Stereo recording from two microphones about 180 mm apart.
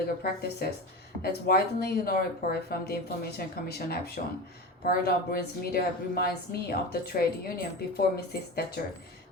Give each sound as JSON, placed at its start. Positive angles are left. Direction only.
{"t": 0.2, "sound": "speech", "side_deg": 60}